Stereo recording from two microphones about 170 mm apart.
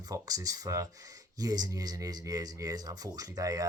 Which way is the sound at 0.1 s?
20° right (ahead or behind).